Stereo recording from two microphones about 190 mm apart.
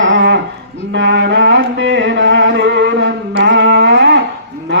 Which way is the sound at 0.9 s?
70° right (ahead or behind).